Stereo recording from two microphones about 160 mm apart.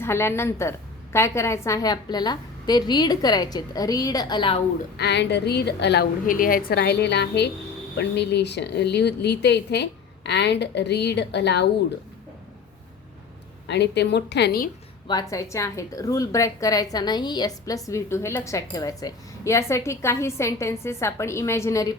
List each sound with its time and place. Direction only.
0.0 s a woman's voice: 15° left (ahead or behind); by 4.6 s 30° left (ahead or behind)
4.9 s a woman's voice: 90° left
13.7 s a woman's voice: 90° left
15.0 s a woman's voice: 25° left (ahead or behind)